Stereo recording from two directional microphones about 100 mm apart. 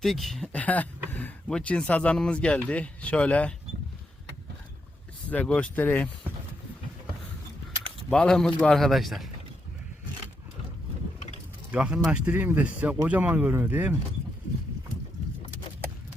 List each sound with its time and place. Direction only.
0.0 s speech: centre (ahead or behind)
5.3 s speech: 15° left (ahead or behind)
8.1 s speech: 5° left (ahead or behind)
11.7 s speech: 10° right (ahead or behind)
12.3 s speech: 20° right (ahead or behind)